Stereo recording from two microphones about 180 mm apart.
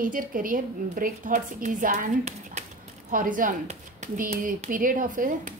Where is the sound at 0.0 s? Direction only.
50° right (ahead or behind).